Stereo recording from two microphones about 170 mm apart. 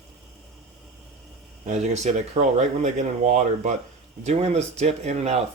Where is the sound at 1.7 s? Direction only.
40° right (ahead or behind).